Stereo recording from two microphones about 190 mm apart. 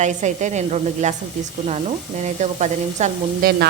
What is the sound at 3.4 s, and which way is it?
Frying, 50° right (ahead or behind).